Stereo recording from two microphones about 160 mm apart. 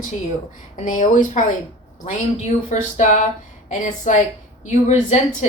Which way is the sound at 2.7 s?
50° left (ahead or behind).